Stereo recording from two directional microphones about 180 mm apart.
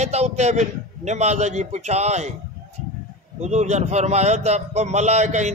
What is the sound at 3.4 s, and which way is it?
A man's voice, 40° right (ahead or behind).